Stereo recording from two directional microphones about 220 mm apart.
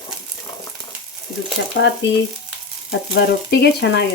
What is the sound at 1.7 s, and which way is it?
Speech, 55° left (ahead or behind).